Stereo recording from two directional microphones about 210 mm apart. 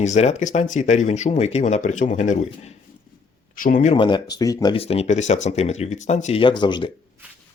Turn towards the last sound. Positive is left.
turn(degrees=20)  # may be behind; listen again after turning